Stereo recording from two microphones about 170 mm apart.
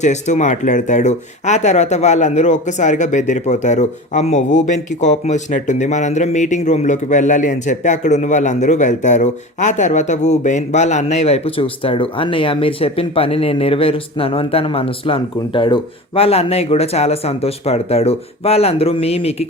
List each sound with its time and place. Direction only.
0.0 s speech: 45° left (ahead or behind)